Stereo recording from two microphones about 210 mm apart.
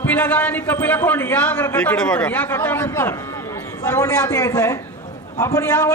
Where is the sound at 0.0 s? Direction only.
10° left (ahead or behind).